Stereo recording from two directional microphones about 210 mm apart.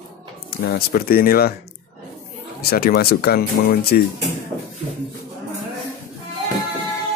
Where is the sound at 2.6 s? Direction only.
45° left (ahead or behind).